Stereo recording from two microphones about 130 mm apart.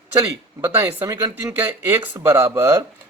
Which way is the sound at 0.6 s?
20° right (ahead or behind).